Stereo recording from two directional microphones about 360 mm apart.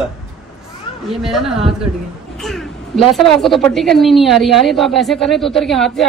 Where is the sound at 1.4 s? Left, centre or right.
Centre.